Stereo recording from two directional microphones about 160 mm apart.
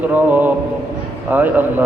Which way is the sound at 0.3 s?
10° right (ahead or behind).